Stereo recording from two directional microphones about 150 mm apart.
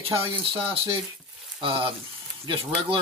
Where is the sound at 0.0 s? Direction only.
40° right (ahead or behind).